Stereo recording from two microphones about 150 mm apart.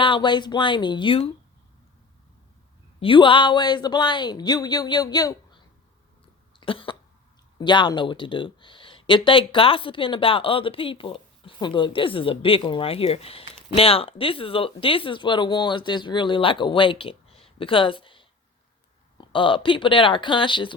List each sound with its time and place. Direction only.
0.0 s speech: 35° left (ahead or behind)
3.0 s speech: 35° left (ahead or behind)
6.6 s cough: 35° left (ahead or behind)
7.6 s speech: 30° left (ahead or behind)